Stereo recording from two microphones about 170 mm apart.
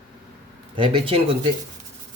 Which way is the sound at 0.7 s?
30° right (ahead or behind).